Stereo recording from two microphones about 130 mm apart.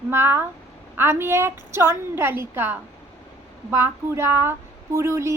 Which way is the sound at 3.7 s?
20° right (ahead or behind).